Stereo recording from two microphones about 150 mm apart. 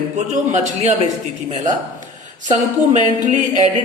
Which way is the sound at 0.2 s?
50° right (ahead or behind).